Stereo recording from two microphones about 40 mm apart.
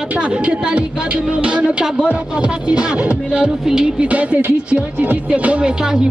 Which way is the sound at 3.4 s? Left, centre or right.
Centre.